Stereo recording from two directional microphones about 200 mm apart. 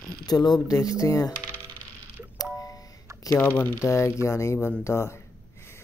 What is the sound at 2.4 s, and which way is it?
Music, 15° left (ahead or behind).